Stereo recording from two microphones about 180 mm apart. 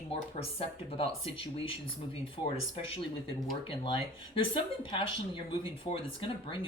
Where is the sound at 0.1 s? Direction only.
35° left (ahead or behind).